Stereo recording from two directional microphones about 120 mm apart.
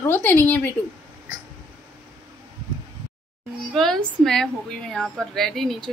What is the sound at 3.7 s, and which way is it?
A woman's voice, 5° left (ahead or behind).